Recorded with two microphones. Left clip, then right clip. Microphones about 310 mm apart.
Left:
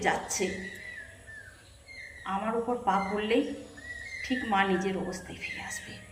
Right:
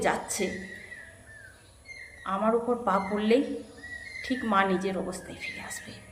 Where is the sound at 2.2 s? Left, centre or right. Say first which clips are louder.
Right 4 dB; centre.